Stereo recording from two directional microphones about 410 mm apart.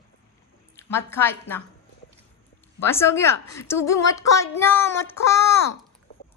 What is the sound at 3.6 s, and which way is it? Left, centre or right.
Child singing, centre.